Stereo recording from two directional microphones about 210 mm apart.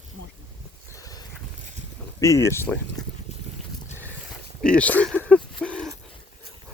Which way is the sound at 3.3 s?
30° left (ahead or behind).